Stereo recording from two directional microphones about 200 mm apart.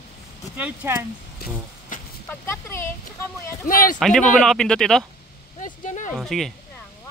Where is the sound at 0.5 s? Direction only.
10° right (ahead or behind).